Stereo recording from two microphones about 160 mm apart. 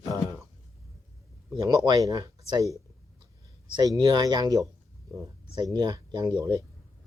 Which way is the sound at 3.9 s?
25° right (ahead or behind).